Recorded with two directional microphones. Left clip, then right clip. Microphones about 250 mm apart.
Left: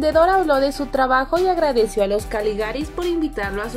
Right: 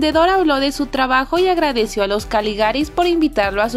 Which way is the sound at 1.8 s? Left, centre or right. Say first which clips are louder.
Even; right.